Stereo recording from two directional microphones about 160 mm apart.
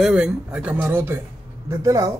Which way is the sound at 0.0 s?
5° right (ahead or behind).